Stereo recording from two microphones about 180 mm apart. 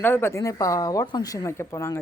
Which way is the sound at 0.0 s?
10° left (ahead or behind).